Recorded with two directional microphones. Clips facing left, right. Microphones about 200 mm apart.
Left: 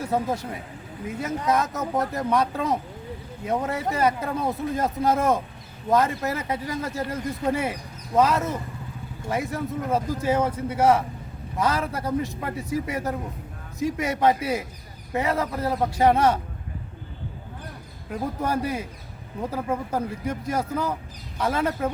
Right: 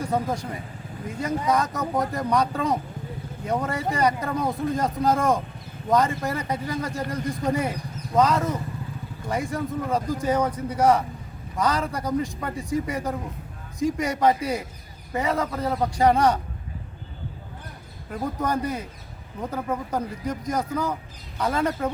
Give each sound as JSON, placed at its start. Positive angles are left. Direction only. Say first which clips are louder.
{"t": 0.0, "sound": "speech", "louder": "even", "side_deg": 5}
{"t": 18.1, "sound": "speech", "louder": "even", "side_deg": 10}